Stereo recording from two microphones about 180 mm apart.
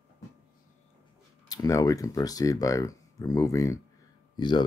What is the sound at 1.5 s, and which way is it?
Speech, 20° left (ahead or behind).